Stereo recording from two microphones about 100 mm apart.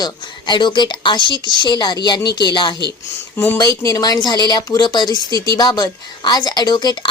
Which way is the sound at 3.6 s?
35° left (ahead or behind).